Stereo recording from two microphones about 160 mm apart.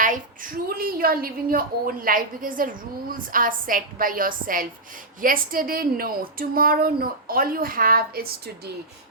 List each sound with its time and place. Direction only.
0.0 s a woman's voice: 55° right (ahead or behind)